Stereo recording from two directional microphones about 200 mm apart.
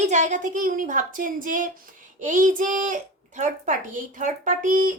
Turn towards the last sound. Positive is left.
turn(degrees=-40)  # may be behind; listen again after turning